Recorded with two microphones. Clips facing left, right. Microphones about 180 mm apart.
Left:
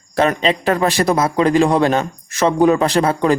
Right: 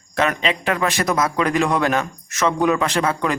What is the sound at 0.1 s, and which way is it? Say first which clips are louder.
A man's voice: left 5 dB; 35° left (ahead or behind).